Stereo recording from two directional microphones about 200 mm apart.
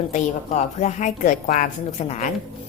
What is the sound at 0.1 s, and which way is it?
A woman's voice, 35° left (ahead or behind).